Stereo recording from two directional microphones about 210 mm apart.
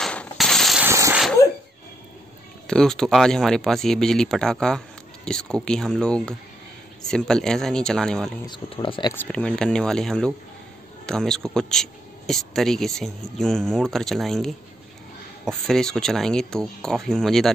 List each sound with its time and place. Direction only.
0.0 s coin: 5° left (ahead or behind)
0.8 s a sound: 15° right (ahead or behind)
1.2 s sneeze: 10° left (ahead or behind)
2.6 s speech: 5° left (ahead or behind)
8.5 s speech: 25° left (ahead or behind)
9.1 s speech: 5° left (ahead or behind)